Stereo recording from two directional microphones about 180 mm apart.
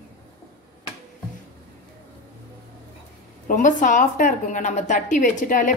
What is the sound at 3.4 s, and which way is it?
A woman's voice, 45° left (ahead or behind).